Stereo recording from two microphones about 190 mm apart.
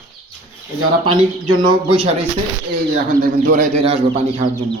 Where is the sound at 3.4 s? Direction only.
45° right (ahead or behind).